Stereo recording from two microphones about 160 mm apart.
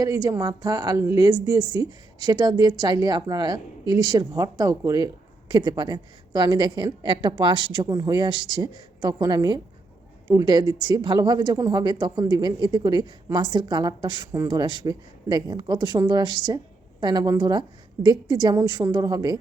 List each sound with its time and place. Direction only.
0.0 s speech: 20° right (ahead or behind)